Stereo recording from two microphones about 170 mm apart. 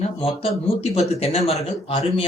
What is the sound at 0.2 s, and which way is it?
Speech, 35° left (ahead or behind).